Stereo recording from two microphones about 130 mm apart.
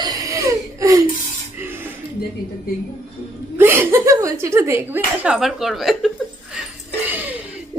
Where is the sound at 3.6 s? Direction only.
20° right (ahead or behind); by 6.1 s centre (ahead or behind).